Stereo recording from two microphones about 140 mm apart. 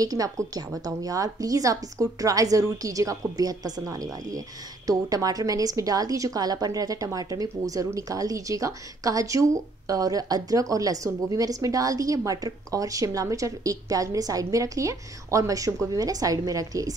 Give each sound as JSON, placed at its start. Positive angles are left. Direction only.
{"t": 0.0, "sound": "a woman's voice", "side_deg": -25}